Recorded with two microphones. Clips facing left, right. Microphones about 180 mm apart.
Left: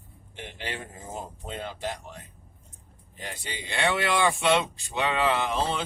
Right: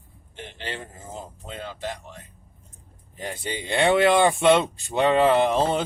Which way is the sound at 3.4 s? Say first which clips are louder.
Right 7 dB; 55° right (ahead or behind).